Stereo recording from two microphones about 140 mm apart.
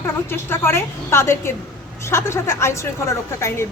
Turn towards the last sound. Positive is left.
turn(degrees=20)  # may be behind; listen again after turning